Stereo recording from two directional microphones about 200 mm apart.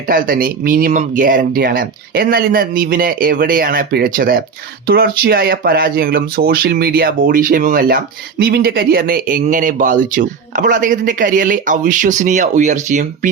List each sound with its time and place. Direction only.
0.1 s speech: 45° right (ahead or behind)